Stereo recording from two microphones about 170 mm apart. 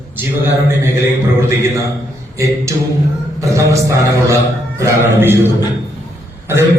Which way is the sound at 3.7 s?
15° right (ahead or behind).